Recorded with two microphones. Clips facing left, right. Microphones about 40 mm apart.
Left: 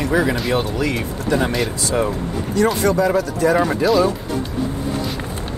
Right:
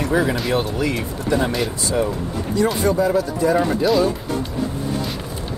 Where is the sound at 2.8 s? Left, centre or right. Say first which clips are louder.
Left 1 dB; left.